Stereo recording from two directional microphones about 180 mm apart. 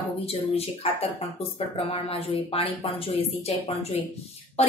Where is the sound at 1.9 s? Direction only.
35° left (ahead or behind).